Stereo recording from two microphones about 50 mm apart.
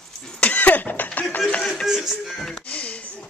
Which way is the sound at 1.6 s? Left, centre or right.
Centre.